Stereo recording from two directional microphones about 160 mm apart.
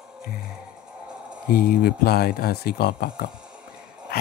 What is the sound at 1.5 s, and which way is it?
Speech, 70° left (ahead or behind).